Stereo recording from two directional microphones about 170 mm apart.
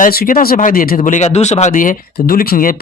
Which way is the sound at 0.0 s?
55° left (ahead or behind).